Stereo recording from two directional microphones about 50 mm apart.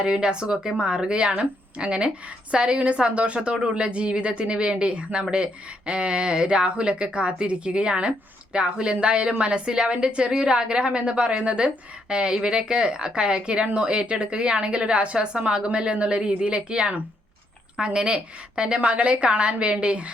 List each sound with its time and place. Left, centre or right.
0.0 s a woman's voice: centre